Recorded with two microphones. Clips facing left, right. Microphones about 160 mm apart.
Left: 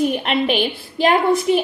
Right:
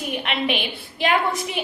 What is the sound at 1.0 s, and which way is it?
Speech, 40° left (ahead or behind).